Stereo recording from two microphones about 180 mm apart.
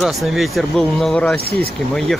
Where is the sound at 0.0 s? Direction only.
Centre (ahead or behind).